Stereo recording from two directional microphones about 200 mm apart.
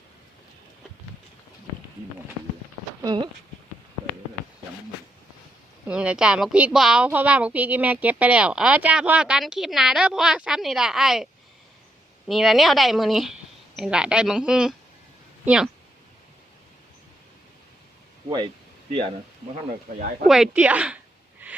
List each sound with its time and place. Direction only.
3.0 s speech: 20° right (ahead or behind)
5.8 s speech: 5° right (ahead or behind)
12.3 s speech: centre (ahead or behind)
20.2 s speech: centre (ahead or behind)
21.4 s a sound: 10° right (ahead or behind)